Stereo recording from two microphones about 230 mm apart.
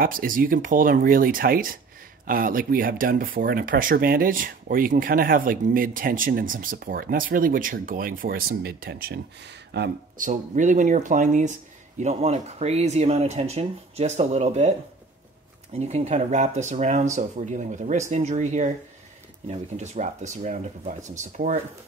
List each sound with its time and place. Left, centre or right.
0.0 s speech: right
15.8 s speech: right